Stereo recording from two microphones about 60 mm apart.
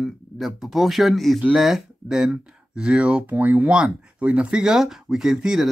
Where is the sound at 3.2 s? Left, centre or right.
Right.